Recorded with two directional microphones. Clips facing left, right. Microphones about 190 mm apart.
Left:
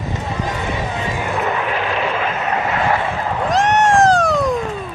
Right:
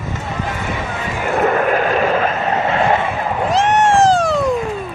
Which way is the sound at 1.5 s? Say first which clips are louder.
Right 5 dB; 50° right (ahead or behind).